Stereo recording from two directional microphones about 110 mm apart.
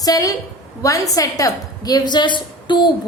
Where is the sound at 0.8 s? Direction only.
30° left (ahead or behind).